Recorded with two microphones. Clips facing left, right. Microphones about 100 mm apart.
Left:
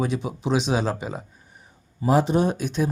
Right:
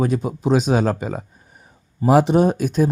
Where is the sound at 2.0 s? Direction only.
75° right (ahead or behind).